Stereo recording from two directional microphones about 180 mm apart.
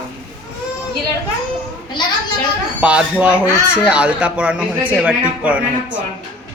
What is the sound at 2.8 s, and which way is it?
Speech, 5° right (ahead or behind).